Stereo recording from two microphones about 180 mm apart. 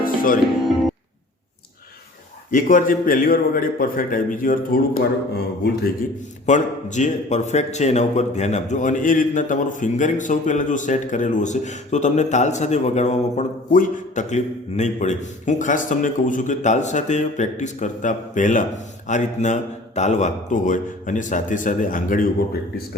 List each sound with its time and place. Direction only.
0.0 s music: 50° left (ahead or behind)
2.5 s a man's voice: 45° left (ahead or behind)
6.4 s a man's voice: 40° left (ahead or behind)